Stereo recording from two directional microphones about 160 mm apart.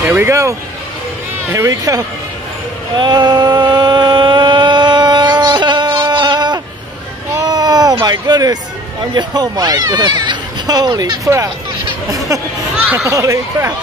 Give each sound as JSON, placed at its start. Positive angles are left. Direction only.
{"t": 0.1, "sound": "speech", "side_deg": -15}
{"t": 3.0, "sound": "a sound", "side_deg": -25}
{"t": 9.1, "sound": "speech", "side_deg": -25}
{"t": 12.8, "sound": "speech", "side_deg": -15}